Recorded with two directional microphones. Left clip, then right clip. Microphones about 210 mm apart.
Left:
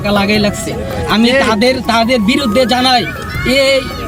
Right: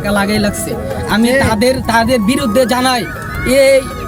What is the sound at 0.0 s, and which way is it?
Speech, centre (ahead or behind).